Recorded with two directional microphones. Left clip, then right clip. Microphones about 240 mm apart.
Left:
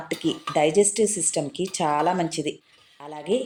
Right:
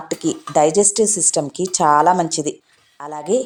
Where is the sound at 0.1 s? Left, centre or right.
Centre.